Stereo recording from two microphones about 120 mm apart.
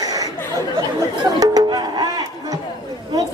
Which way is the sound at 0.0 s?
30° right (ahead or behind).